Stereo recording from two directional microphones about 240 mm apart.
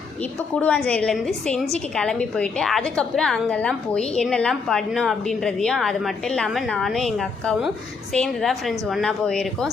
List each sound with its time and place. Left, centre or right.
0.2 s a woman's voice: centre